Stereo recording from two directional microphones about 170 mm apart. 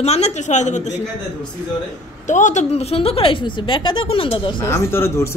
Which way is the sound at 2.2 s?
45° left (ahead or behind).